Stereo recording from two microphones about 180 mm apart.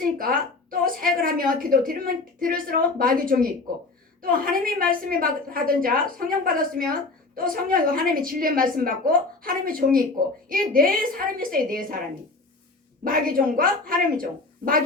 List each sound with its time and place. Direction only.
0.0 s a woman's voice: 55° right (ahead or behind)
13.1 s a woman's voice: 50° right (ahead or behind)